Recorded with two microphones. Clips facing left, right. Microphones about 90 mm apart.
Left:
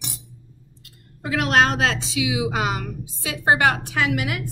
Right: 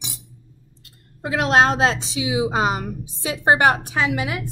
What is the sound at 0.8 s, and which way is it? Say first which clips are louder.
A woman's voice: right 4 dB; 30° right (ahead or behind).